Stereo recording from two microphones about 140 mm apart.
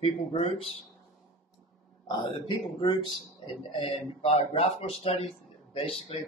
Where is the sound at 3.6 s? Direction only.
40° left (ahead or behind).